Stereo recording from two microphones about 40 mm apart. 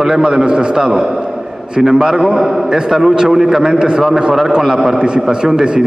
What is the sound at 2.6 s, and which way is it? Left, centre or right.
A man's voice, centre.